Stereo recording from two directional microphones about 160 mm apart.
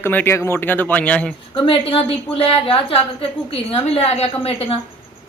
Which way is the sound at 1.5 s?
35° left (ahead or behind).